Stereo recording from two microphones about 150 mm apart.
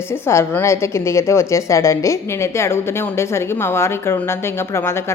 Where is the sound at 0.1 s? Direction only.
15° left (ahead or behind).